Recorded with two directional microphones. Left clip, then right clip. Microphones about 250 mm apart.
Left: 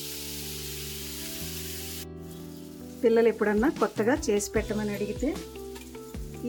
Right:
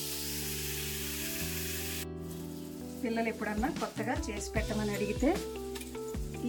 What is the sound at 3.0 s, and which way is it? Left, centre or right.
Sizzle, centre.